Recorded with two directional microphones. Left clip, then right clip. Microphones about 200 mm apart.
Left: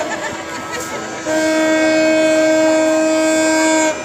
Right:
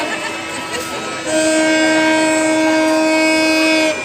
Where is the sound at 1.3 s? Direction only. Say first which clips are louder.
Right 1 dB; 35° left (ahead or behind); by 3.9 s 15° left (ahead or behind).